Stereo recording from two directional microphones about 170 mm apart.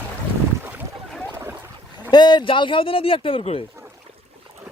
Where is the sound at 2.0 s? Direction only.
25° left (ahead or behind).